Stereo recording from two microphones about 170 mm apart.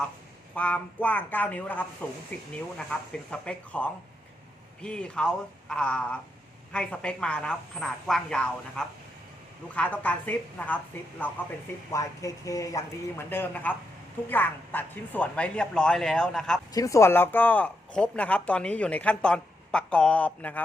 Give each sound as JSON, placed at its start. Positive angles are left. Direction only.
{"t": 0.5, "sound": "speech", "side_deg": 5}
{"t": 16.7, "sound": "speech", "side_deg": 20}